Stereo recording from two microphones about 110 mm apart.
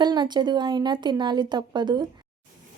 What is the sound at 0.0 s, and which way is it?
Speech, 40° right (ahead or behind).